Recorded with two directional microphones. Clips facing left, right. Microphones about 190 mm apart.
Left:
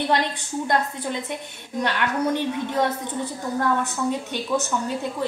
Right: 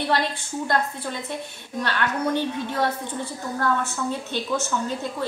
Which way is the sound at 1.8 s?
15° left (ahead or behind).